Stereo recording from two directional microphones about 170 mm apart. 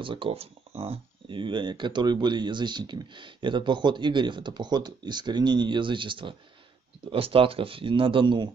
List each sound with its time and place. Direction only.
0.0 s speech: 30° right (ahead or behind)